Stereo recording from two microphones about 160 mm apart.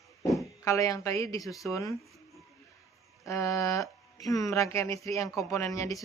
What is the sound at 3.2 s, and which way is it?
Speech, 20° left (ahead or behind).